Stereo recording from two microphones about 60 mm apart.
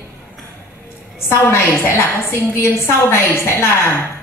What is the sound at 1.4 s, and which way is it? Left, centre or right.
A woman's voice, left.